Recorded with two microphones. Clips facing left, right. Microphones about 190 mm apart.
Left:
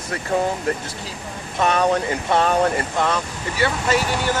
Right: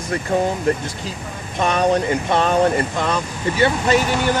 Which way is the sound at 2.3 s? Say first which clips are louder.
Right 1 dB; 20° right (ahead or behind).